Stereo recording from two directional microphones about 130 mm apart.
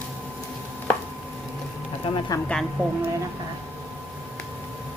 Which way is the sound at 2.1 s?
45° left (ahead or behind).